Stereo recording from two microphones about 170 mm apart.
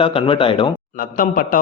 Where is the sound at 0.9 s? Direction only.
55° left (ahead or behind).